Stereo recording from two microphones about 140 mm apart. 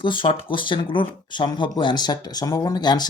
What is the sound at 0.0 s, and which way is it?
Speech, 35° left (ahead or behind).